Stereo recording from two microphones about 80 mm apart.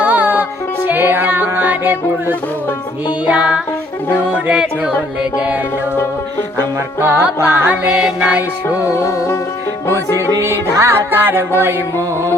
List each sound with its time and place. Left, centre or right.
0.0 s music: centre
7.0 s music: right
7.9 s music: centre
8.9 s music: left
10.2 s music: right